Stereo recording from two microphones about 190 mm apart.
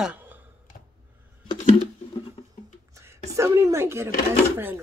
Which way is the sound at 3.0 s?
15° right (ahead or behind).